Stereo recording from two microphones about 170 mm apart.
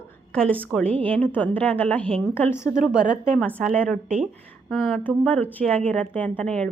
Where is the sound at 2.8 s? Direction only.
5° right (ahead or behind).